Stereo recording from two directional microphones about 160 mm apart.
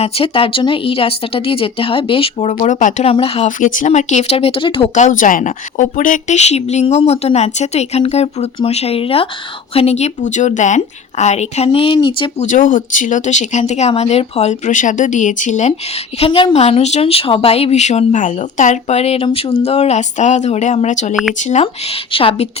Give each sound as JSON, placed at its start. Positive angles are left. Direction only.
{"t": 0.0, "sound": "a woman's voice", "side_deg": 35}
{"t": 3.1, "sound": "a woman's voice", "side_deg": 35}
{"t": 4.9, "sound": "a woman's voice", "side_deg": 50}
{"t": 12.4, "sound": "a woman's voice", "side_deg": 55}
{"t": 16.1, "sound": "a woman's voice", "side_deg": 35}